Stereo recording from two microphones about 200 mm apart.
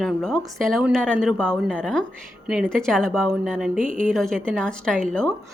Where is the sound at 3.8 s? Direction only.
40° right (ahead or behind).